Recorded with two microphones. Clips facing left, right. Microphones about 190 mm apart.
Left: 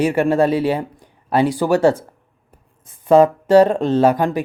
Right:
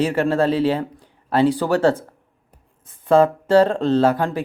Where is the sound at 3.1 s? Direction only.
15° left (ahead or behind).